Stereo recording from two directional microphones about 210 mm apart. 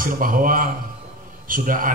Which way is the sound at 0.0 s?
40° right (ahead or behind).